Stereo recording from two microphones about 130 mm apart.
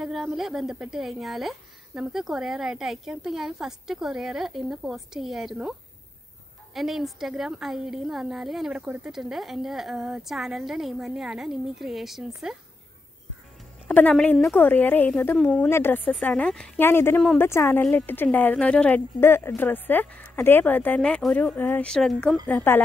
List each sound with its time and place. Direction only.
0.0 s a woman's voice: 5° right (ahead or behind)
13.8 s speech: 10° left (ahead or behind)
16.8 s speech: 15° left (ahead or behind)
22.5 s speech: 15° left (ahead or behind)